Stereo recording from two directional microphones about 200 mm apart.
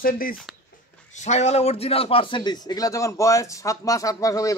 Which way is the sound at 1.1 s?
35° left (ahead or behind).